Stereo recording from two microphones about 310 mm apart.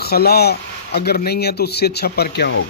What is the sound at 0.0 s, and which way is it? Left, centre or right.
A man's voice, left.